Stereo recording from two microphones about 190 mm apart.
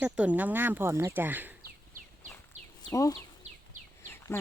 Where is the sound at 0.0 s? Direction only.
10° right (ahead or behind).